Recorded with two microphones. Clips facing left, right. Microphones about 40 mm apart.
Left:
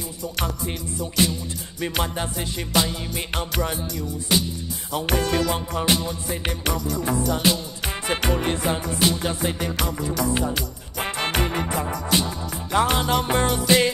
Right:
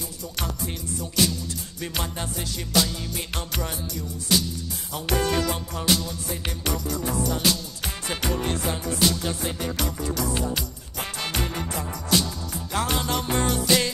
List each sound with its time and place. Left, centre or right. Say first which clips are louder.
1.2 s music: left 1 dB; left